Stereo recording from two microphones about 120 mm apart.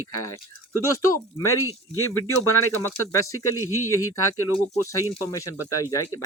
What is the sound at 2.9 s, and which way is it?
Speech, 25° left (ahead or behind).